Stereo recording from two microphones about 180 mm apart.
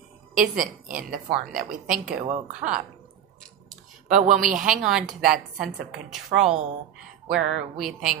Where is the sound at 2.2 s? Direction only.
45° right (ahead or behind).